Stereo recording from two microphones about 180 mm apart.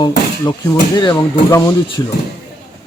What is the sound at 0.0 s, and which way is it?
A man's voice, 25° left (ahead or behind).